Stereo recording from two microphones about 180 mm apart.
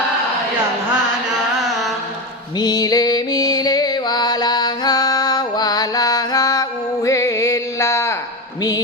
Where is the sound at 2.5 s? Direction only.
20° left (ahead or behind).